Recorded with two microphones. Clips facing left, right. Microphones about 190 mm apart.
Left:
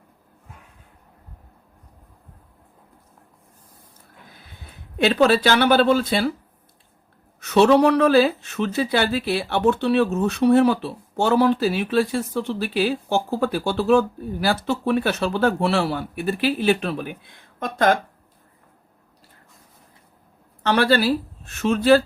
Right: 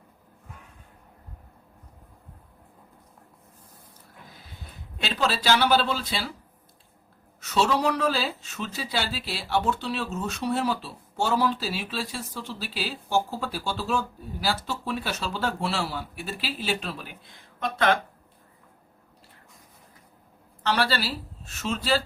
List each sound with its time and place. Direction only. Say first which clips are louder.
4.3 s a sound: left 1 dB; 55° left (ahead or behind)
4.9 s speech: left 11 dB; 60° left (ahead or behind)
7.4 s speech: left 9 dB; 60° left (ahead or behind)
20.7 s speech: left 8 dB; 55° left (ahead or behind)